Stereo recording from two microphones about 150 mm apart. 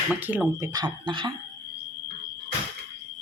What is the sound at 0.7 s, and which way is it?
Speech, 30° right (ahead or behind).